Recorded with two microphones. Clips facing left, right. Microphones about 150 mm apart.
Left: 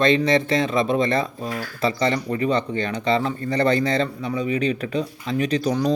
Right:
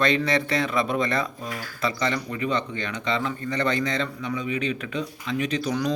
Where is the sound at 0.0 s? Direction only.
25° left (ahead or behind).